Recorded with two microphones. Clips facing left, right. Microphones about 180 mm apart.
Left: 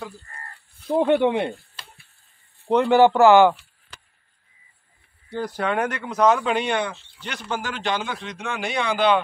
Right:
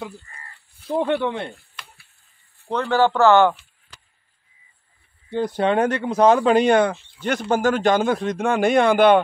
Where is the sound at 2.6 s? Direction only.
15° left (ahead or behind).